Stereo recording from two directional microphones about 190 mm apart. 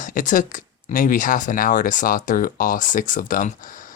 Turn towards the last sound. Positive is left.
turn(degrees=45)  # may be behind; listen again after turning